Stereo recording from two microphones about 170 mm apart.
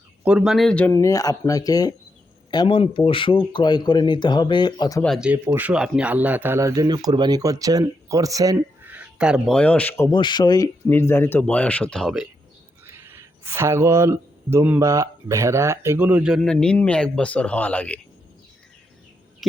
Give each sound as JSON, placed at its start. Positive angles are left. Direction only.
{"t": 0.3, "sound": "speech", "side_deg": -5}
{"t": 0.9, "sound": "speech", "side_deg": 20}
{"t": 5.0, "sound": "speech", "side_deg": -5}
{"t": 9.6, "sound": "speech", "side_deg": 10}
{"t": 10.1, "sound": "speech", "side_deg": 25}
{"t": 12.8, "sound": "speech", "side_deg": -15}